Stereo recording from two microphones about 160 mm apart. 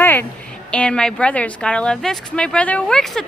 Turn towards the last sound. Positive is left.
turn(degrees=5)  # may be behind; listen again after turning